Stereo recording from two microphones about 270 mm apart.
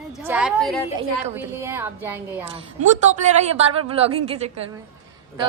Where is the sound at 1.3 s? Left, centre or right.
Centre.